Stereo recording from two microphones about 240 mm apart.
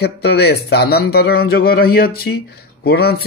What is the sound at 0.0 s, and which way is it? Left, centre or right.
Speech, left.